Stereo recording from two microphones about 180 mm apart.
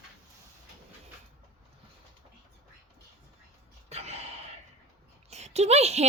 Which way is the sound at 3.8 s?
35° right (ahead or behind).